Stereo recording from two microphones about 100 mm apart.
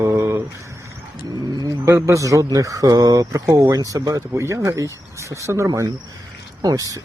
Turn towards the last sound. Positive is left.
turn(degrees=-40)  # may be behind; listen again after turning